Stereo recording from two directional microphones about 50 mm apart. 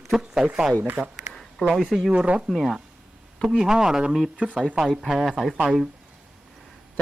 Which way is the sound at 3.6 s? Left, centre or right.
Centre.